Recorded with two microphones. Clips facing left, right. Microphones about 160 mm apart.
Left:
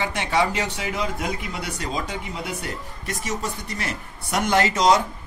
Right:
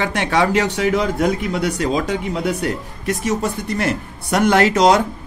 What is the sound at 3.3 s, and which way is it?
Speech, 55° right (ahead or behind).